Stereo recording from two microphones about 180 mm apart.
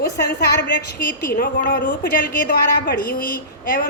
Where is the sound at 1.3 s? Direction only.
50° left (ahead or behind).